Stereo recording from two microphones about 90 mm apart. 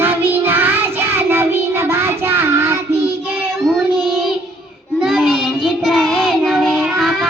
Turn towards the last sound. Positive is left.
turn(degrees=0)  # may be behind; listen again after turning